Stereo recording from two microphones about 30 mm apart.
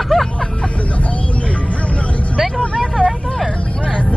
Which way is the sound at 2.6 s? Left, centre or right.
Left.